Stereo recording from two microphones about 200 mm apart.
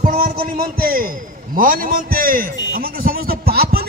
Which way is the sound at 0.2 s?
45° right (ahead or behind).